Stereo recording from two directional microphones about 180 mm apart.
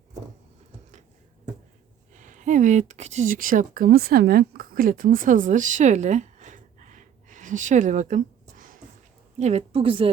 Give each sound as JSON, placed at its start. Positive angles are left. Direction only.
{"t": 2.1, "sound": "speech", "side_deg": -45}
{"t": 9.4, "sound": "a woman's voice", "side_deg": -35}